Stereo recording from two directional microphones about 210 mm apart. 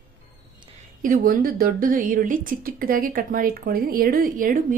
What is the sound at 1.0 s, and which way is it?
Speech, 40° right (ahead or behind).